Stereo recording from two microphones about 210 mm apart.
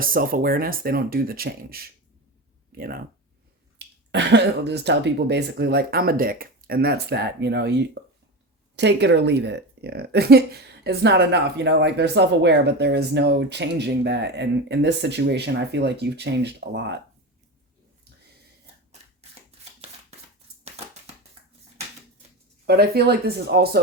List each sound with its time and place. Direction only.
0.0 s speech: 40° right (ahead or behind)
18.9 s a sound: 30° right (ahead or behind)
22.6 s speech: 50° right (ahead or behind)